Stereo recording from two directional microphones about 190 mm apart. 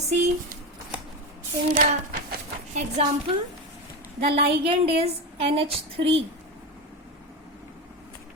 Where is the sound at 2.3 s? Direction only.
40° right (ahead or behind).